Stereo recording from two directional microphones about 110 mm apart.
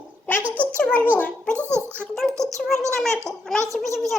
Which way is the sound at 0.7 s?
10° left (ahead or behind).